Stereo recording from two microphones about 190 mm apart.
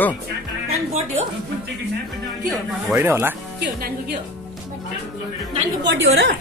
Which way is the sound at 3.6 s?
55° right (ahead or behind).